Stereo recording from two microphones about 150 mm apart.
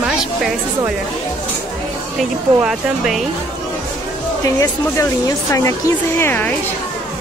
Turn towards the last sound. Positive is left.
turn(degrees=15)  # may be behind; listen again after turning